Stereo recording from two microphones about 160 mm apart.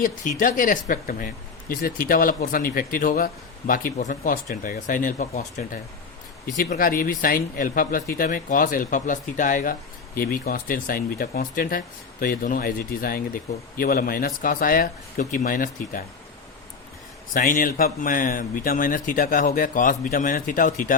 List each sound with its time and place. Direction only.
0.0 s speech: 55° left (ahead or behind)
17.3 s speech: 55° left (ahead or behind)